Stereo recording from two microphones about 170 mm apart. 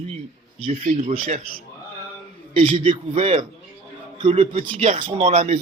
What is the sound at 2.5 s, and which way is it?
A man's voice, 35° right (ahead or behind).